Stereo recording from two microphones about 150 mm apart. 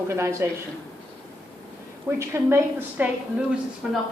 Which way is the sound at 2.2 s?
15° right (ahead or behind).